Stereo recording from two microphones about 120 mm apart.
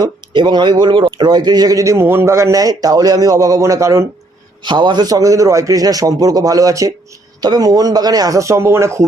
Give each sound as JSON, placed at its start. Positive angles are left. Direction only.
{"t": 0.0, "sound": "speech", "side_deg": -40}
{"t": 4.6, "sound": "speech", "side_deg": -40}